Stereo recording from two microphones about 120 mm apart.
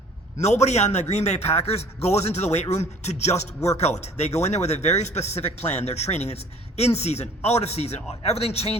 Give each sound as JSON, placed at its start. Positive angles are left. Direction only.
{"t": 0.3, "sound": "a man's voice", "side_deg": 70}